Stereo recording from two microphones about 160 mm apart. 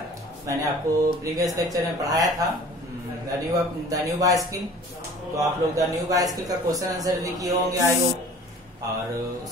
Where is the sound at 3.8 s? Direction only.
20° right (ahead or behind).